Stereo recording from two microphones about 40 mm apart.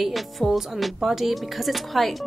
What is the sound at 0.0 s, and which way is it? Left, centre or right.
Speech, centre.